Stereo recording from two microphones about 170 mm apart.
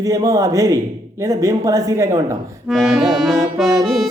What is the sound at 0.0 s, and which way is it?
Speech, 20° right (ahead or behind).